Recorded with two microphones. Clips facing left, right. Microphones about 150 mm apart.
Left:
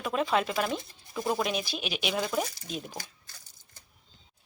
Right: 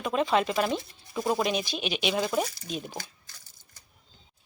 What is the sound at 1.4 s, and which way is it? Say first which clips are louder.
Speech: right 3 dB; centre (ahead or behind).